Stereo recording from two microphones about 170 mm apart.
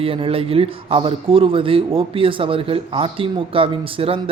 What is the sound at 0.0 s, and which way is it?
A man's voice, 35° right (ahead or behind).